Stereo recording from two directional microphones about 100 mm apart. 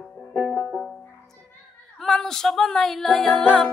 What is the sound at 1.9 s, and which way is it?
Speech, 5° left (ahead or behind).